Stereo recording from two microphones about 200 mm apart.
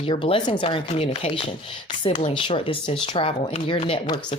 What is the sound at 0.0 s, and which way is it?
Speech, 25° left (ahead or behind).